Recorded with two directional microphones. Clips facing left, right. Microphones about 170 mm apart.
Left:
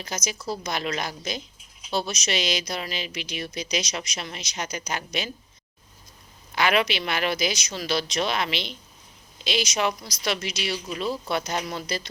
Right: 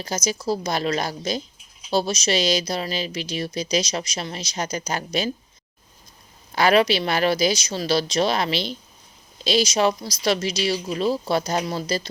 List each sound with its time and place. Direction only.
0.0 s speech: 35° right (ahead or behind)
6.6 s speech: 35° right (ahead or behind)